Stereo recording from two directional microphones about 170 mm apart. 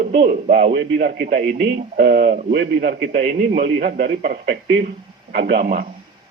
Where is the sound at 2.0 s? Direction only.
70° right (ahead or behind).